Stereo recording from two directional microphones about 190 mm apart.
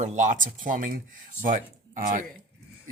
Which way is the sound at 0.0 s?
40° right (ahead or behind).